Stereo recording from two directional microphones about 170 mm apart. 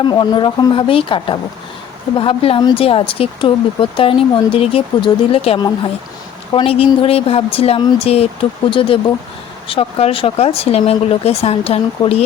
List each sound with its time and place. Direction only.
0.0 s a woman's voice: 30° left (ahead or behind)